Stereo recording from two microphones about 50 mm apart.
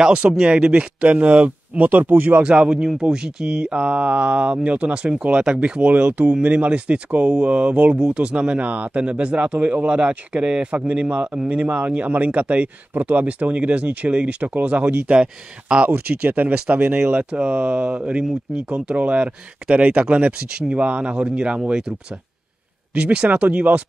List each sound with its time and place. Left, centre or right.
0.0 s a man's voice: right
2.4 s a man's voice: right
16.5 s a man's voice: right
22.9 s a man's voice: right